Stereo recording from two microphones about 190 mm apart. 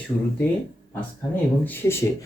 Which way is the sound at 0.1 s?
30° left (ahead or behind).